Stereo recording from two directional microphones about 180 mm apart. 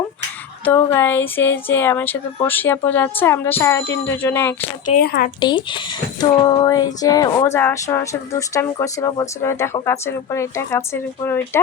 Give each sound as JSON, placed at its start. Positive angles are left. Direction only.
{"t": 0.6, "sound": "speech", "side_deg": 10}
{"t": 4.9, "sound": "a woman's voice", "side_deg": 55}
{"t": 5.4, "sound": "speech", "side_deg": 25}